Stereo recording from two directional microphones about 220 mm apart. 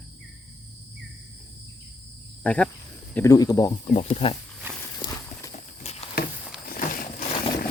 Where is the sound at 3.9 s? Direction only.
30° left (ahead or behind).